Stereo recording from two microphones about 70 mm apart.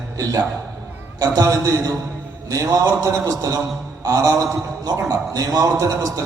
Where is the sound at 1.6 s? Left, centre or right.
Right.